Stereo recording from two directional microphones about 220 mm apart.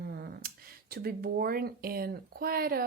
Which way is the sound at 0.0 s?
45° right (ahead or behind).